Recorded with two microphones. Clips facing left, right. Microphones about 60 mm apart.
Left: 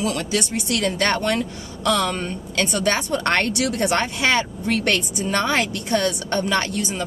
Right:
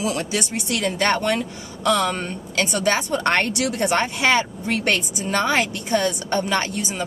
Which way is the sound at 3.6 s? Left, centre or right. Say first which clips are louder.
Even; centre.